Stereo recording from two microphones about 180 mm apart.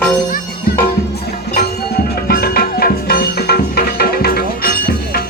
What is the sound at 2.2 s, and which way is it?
Music, 60° left (ahead or behind).